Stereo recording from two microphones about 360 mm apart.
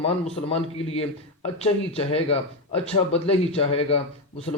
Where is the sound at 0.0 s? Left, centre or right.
Centre.